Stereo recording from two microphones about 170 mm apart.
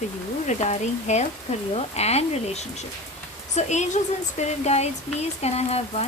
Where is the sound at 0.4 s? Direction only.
45° left (ahead or behind).